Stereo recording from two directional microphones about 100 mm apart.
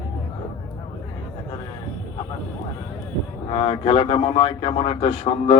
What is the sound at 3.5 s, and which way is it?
Speech, 65° left (ahead or behind).